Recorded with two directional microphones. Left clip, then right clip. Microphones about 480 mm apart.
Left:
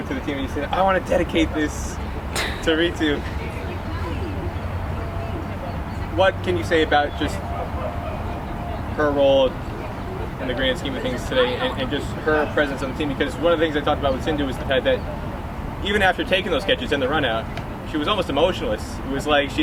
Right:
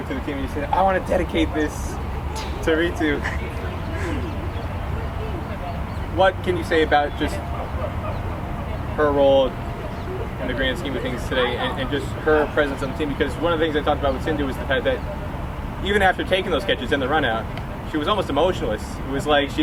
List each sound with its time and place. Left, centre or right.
0.7 s speech: centre
6.1 s speech: centre
9.0 s speech: centre
10.6 s speech: centre